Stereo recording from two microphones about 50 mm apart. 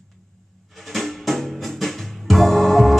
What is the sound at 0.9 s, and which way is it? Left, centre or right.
Music, centre.